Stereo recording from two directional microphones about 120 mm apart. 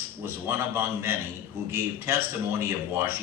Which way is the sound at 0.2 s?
20° right (ahead or behind).